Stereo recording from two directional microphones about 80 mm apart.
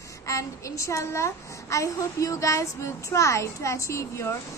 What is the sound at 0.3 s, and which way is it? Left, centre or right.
A woman's voice, left.